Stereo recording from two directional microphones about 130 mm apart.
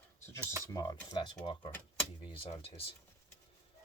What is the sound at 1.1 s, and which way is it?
Speech, 40° left (ahead or behind).